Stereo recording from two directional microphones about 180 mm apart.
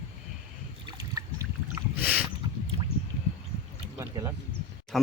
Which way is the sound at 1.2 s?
20° right (ahead or behind).